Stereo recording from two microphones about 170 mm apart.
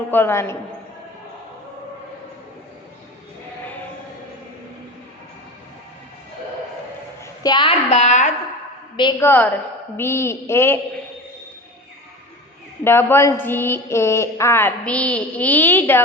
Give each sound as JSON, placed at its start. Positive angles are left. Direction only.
{"t": 0.1, "sound": "a woman's voice", "side_deg": 15}
{"t": 7.4, "sound": "a woman's voice", "side_deg": 30}
{"t": 9.2, "sound": "a woman's voice", "side_deg": 10}
{"t": 12.8, "sound": "a woman's voice", "side_deg": 15}